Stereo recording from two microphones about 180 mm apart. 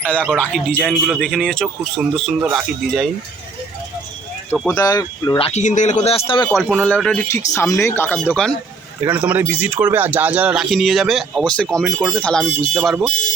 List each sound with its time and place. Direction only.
0.0 s a man's voice: 5° left (ahead or behind)
4.5 s a man's voice: 5° left (ahead or behind)
4.8 s speech: 20° left (ahead or behind)
5.5 s speech: 40° left (ahead or behind)
6.5 s a man's voice: centre (ahead or behind)
9.0 s a man's voice: 10° right (ahead or behind)